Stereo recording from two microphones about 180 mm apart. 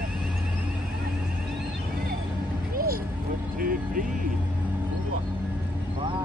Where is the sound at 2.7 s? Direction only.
55° right (ahead or behind).